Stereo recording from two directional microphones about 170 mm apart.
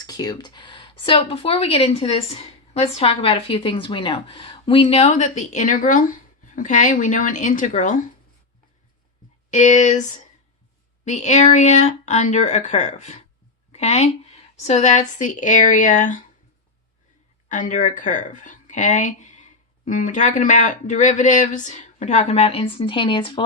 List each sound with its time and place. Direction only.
0.0 s speech: 20° left (ahead or behind); by 7.9 s 50° left (ahead or behind)
9.5 s speech: 45° left (ahead or behind)
17.5 s speech: 50° left (ahead or behind); by 23.4 s 30° left (ahead or behind)